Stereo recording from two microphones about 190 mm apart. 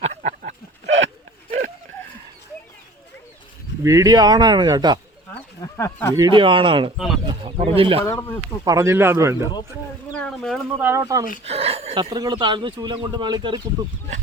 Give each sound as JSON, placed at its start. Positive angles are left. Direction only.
{"t": 0.0, "sound": "livestock", "side_deg": -35}
{"t": 0.9, "sound": "a sound", "side_deg": -80}
{"t": 1.5, "sound": "a sound", "side_deg": -40}
{"t": 3.8, "sound": "speech", "side_deg": -20}
{"t": 5.7, "sound": "speech", "side_deg": 10}
{"t": 6.1, "sound": "speech", "side_deg": -20}
{"t": 6.9, "sound": "speech", "side_deg": 0}
{"t": 7.3, "sound": "chicken", "side_deg": -30}
{"t": 8.6, "sound": "speech", "side_deg": -15}
{"t": 10.2, "sound": "a sound", "side_deg": 5}
{"t": 10.8, "sound": "speech", "side_deg": -10}
{"t": 11.4, "sound": "speech", "side_deg": -30}
{"t": 12.1, "sound": "speech", "side_deg": -25}